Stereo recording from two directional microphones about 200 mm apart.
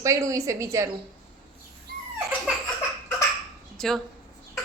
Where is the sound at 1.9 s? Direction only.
50° right (ahead or behind).